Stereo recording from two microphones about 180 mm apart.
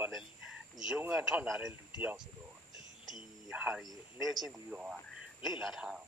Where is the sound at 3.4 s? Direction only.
5° right (ahead or behind).